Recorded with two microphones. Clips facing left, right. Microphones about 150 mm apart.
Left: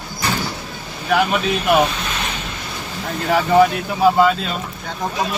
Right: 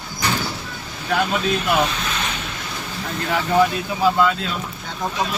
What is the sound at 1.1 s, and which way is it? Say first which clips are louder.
Speech: left 3 dB; 60° left (ahead or behind).